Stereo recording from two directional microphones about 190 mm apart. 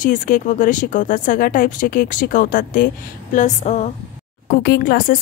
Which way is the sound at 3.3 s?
40° left (ahead or behind).